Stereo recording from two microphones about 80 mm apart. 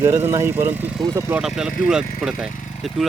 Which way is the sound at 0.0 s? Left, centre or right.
Right.